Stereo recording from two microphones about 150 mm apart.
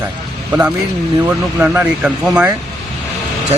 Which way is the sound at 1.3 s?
15° right (ahead or behind).